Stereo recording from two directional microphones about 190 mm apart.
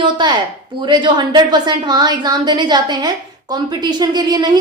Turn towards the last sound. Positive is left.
turn(degrees=-20)  # may be behind; listen again after turning